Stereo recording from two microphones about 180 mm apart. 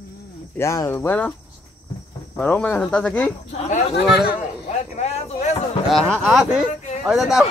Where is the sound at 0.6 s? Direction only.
15° left (ahead or behind).